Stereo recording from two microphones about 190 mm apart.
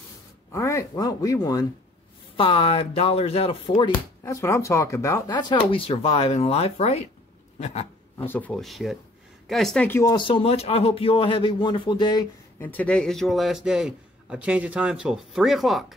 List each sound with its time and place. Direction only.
0.5 s speech: 15° left (ahead or behind)
4.2 s speech: 15° left (ahead or behind); by 7.1 s 35° left (ahead or behind)
7.5 s a sound: 35° left (ahead or behind)
8.3 s speech: 10° left (ahead or behind)